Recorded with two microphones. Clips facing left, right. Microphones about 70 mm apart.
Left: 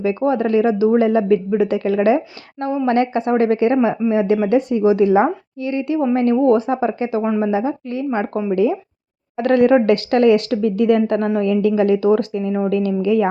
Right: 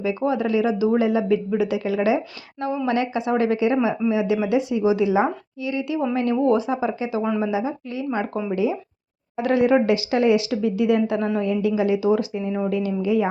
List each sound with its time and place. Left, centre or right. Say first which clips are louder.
0.0 s speech: left 5 dB; left
7.2 s a woman's voice: left 4 dB; left